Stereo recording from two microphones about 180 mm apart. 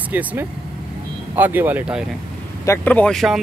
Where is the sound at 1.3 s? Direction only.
10° right (ahead or behind).